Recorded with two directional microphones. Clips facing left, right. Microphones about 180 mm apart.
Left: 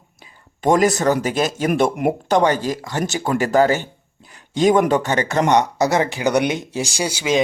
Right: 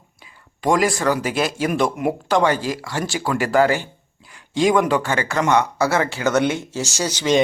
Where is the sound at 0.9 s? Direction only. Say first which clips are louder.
Left 2 dB; 20° left (ahead or behind).